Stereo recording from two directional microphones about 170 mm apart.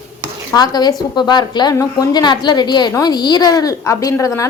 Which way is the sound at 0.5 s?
25° left (ahead or behind).